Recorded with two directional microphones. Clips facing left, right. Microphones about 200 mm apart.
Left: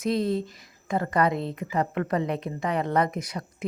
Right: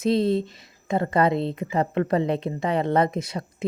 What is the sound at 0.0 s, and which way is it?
Speech, 25° right (ahead or behind).